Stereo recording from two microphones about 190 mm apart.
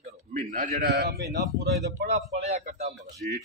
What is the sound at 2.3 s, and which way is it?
Speech, 35° right (ahead or behind).